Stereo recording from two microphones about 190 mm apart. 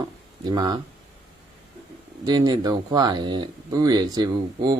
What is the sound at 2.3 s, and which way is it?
Speech, 20° right (ahead or behind).